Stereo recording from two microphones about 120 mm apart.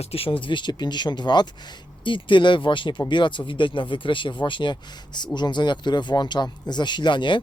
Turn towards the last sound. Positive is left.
turn(degrees=40)  # may be behind; listen again after turning